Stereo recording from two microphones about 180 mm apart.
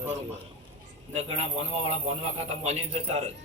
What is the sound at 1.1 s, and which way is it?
A man's voice, 40° right (ahead or behind).